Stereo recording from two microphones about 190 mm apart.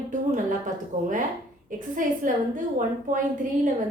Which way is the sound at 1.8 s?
45° right (ahead or behind).